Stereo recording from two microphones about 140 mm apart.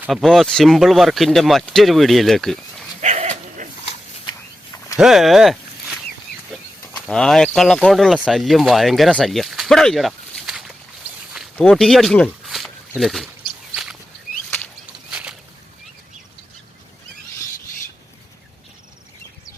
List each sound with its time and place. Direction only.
0.1 s speech: centre (ahead or behind)
3.0 s dog: 55° right (ahead or behind)
4.9 s speech: centre (ahead or behind)
7.1 s speech: 5° left (ahead or behind)
15.1 s a sound: 10° right (ahead or behind)